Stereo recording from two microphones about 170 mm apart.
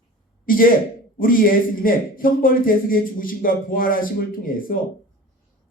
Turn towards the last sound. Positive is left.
turn(degrees=55)  # may be behind; listen again after turning